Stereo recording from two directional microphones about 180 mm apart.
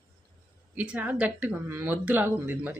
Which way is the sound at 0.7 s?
5° right (ahead or behind).